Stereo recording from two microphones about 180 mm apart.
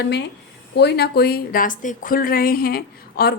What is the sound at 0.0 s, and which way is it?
A woman's voice, 70° left (ahead or behind).